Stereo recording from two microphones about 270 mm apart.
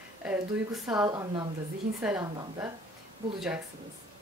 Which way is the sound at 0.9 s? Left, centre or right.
Centre.